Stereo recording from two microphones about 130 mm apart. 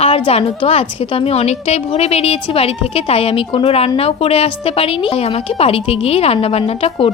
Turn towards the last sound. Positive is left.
turn(degrees=45)  # may be behind; listen again after turning